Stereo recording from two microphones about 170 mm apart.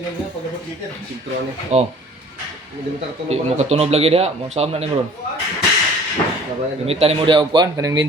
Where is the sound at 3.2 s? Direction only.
40° right (ahead or behind).